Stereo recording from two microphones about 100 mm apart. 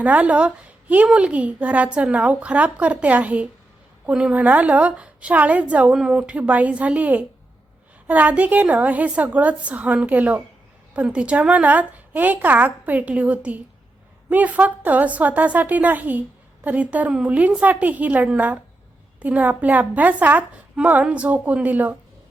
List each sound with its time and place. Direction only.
0.0 s a woman's voice: 15° right (ahead or behind)